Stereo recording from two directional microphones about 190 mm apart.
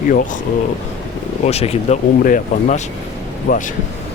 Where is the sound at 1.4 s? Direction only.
30° left (ahead or behind).